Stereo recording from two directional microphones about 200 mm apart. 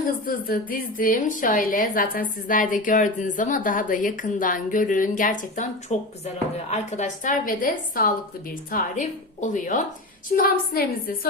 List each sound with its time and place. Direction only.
0.3 s a woman's voice: 45° left (ahead or behind)